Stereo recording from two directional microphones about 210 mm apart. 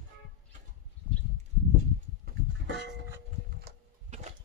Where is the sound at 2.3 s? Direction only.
45° right (ahead or behind).